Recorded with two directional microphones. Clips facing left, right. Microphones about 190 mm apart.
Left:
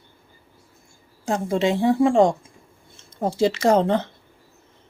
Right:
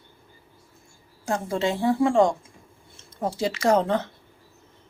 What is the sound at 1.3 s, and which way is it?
A woman's voice, 20° left (ahead or behind).